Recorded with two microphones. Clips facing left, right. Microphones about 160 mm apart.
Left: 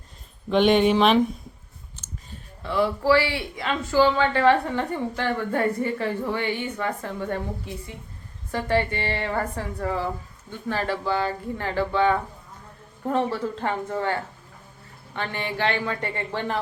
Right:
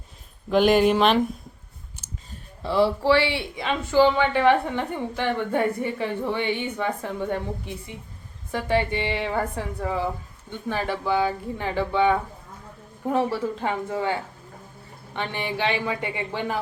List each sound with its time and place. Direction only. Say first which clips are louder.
0.5 s speech: even; centre (ahead or behind)
2.0 s clicking: left 2 dB; 10° right (ahead or behind)
2.6 s speech: right 1 dB; 30° right (ahead or behind); by 16.6 s 10° right (ahead or behind)